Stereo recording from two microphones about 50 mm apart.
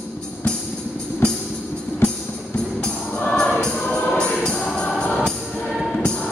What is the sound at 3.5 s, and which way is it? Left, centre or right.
Music, left.